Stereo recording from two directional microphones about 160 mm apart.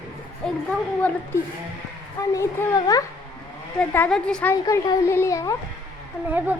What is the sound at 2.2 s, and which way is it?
Speech, 20° left (ahead or behind).